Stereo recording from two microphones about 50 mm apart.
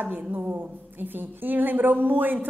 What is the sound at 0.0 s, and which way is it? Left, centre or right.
A woman's voice, right.